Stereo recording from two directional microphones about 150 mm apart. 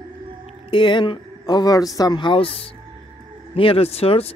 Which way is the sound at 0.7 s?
30° left (ahead or behind).